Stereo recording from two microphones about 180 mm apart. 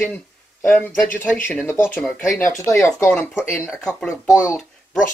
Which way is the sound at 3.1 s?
5° left (ahead or behind).